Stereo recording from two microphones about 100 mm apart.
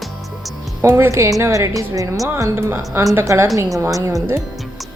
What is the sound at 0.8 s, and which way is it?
A woman's voice, 25° right (ahead or behind).